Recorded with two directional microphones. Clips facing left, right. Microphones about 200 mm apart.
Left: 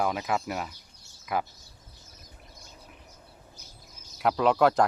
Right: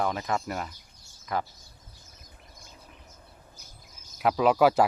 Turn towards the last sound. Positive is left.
turn(degrees=-5)  # may be behind; listen again after turning